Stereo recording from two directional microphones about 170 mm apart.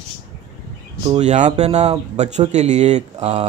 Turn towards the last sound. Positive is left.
turn(degrees=-40)  # may be behind; listen again after turning